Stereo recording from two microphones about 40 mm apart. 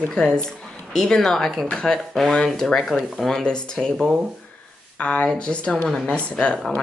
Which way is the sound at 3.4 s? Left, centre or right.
Centre.